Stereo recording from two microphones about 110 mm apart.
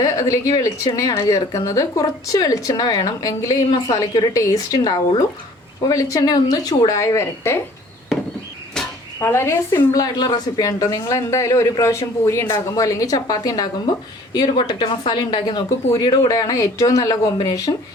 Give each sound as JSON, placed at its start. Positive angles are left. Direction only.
{"t": 0.0, "sound": "a woman's voice", "side_deg": 30}
{"t": 9.2, "sound": "a woman's voice", "side_deg": 25}
{"t": 14.7, "sound": "a woman's voice", "side_deg": 40}